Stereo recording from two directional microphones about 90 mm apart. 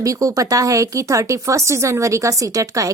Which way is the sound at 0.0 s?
40° right (ahead or behind).